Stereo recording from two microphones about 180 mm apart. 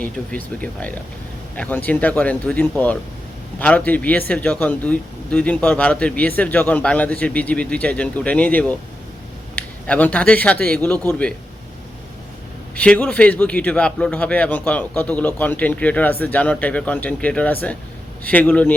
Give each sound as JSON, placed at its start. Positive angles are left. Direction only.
{"t": 0.0, "sound": "speech", "side_deg": 5}
{"t": 12.7, "sound": "speech", "side_deg": 5}